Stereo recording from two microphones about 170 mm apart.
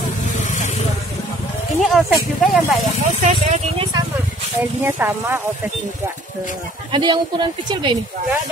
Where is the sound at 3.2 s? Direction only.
45° right (ahead or behind).